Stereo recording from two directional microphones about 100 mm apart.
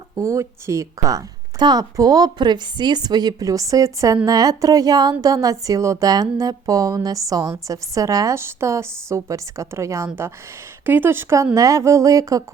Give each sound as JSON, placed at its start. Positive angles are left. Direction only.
{"t": 0.2, "sound": "a woman's voice", "side_deg": -30}